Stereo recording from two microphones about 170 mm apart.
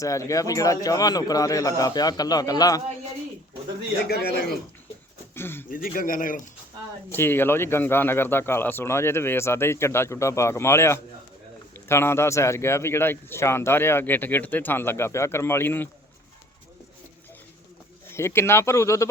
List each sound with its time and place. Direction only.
0.0 s speech: 20° left (ahead or behind)
4.1 s speech: 65° left (ahead or behind)
5.3 s speech: 15° left (ahead or behind)
5.7 s speech: 55° left (ahead or behind)
7.1 s speech: 15° left (ahead or behind)
18.1 s speech: 15° left (ahead or behind)